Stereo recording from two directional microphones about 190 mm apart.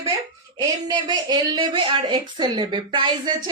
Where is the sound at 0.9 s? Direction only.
20° right (ahead or behind).